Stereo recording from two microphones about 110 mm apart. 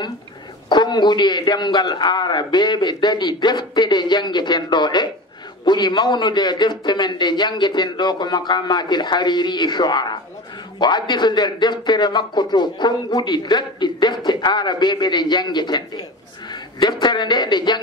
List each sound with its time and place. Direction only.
0.7 s speech: 40° left (ahead or behind)
16.8 s speech: 40° left (ahead or behind)